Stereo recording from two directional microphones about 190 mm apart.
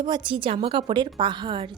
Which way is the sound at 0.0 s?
25° right (ahead or behind).